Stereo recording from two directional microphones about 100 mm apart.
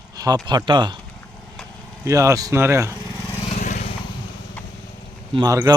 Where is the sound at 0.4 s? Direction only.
50° right (ahead or behind).